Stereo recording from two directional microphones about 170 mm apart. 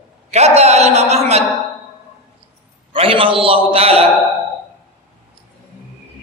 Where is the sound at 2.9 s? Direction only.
30° right (ahead or behind).